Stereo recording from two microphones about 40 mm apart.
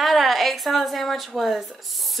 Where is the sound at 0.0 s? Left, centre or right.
Centre.